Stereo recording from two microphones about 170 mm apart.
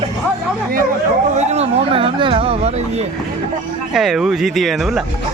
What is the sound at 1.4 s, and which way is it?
Speech, 40° right (ahead or behind).